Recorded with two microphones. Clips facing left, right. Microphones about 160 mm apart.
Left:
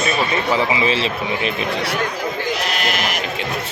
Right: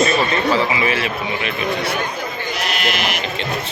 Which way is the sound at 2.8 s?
40° left (ahead or behind).